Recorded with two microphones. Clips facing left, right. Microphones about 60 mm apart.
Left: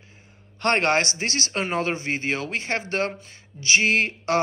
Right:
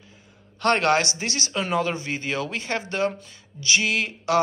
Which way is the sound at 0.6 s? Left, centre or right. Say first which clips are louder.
Right 1 dB; left.